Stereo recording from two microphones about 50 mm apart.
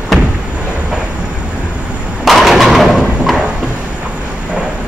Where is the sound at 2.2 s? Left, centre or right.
Centre.